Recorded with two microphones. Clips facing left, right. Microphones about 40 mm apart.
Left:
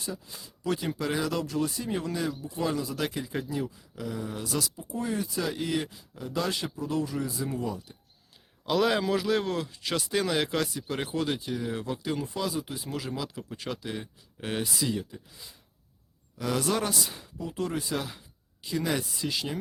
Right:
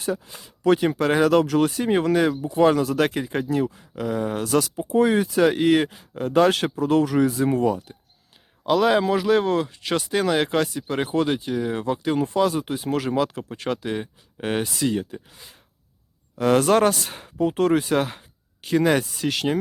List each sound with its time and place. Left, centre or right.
0.3 s speech: right
1.3 s speech: right
4.4 s speech: right
4.9 s speech: right
7.6 s speech: right
8.6 s speech: centre; by 19.5 s right